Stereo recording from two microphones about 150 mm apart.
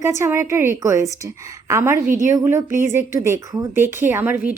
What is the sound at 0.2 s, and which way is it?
A woman's voice, 15° right (ahead or behind).